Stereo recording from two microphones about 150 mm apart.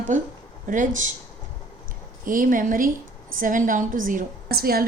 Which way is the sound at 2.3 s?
65° right (ahead or behind).